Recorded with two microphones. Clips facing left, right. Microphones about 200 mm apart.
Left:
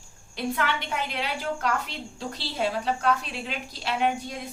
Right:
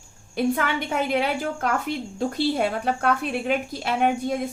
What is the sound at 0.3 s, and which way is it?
A woman's voice, 50° right (ahead or behind).